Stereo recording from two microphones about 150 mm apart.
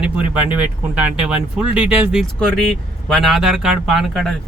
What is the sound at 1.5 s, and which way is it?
A man's voice, 5° right (ahead or behind).